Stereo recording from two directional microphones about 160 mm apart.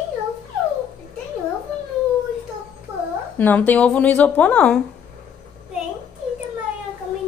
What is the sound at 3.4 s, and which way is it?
Speech, 10° left (ahead or behind).